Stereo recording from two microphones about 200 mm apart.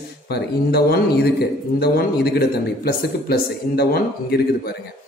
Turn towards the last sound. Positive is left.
turn(degrees=50)  # may be behind; listen again after turning